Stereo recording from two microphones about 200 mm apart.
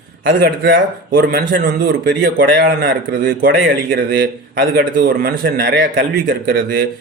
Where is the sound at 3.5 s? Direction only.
60° right (ahead or behind).